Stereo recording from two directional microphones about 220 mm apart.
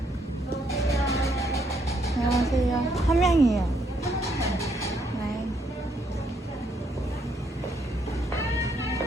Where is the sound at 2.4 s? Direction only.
Centre (ahead or behind).